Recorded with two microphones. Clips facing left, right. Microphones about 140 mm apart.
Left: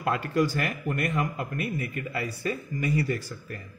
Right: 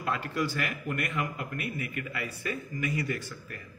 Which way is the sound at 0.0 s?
45° left (ahead or behind).